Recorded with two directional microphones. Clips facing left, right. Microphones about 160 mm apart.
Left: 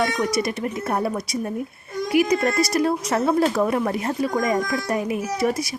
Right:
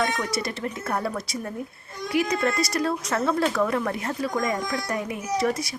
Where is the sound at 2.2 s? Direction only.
25° left (ahead or behind).